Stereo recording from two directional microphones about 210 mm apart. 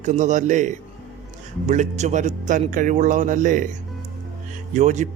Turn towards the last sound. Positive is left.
turn(degrees=-35)  # may be behind; listen again after turning